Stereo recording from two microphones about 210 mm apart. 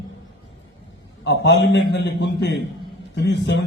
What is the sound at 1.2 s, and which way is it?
A man's voice, 55° left (ahead or behind).